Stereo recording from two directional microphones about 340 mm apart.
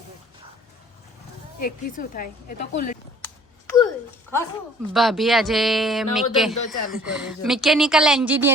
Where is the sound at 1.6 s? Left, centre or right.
Left.